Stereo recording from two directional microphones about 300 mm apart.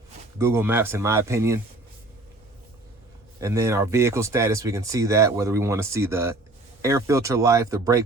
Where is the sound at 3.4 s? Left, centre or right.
Centre.